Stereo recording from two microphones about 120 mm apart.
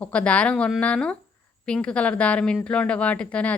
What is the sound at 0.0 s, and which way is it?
A woman's voice, 10° left (ahead or behind).